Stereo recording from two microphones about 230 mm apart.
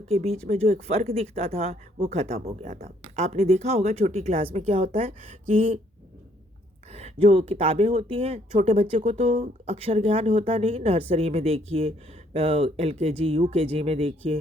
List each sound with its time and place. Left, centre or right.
0.1 s speech: right
6.9 s speech: right